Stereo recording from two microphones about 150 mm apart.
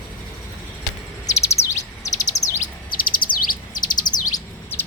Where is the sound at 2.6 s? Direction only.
70° left (ahead or behind).